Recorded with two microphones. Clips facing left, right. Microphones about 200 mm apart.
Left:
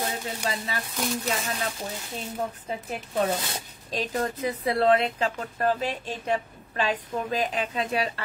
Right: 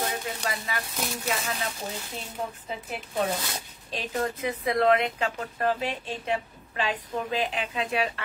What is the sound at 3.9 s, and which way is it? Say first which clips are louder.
Speech: left 1 dB; 40° left (ahead or behind).